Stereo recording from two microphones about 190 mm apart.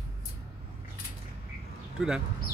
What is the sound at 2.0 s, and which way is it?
Speech, 5° right (ahead or behind).